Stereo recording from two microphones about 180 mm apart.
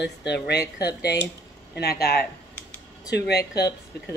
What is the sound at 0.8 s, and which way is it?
A woman's voice, 65° left (ahead or behind).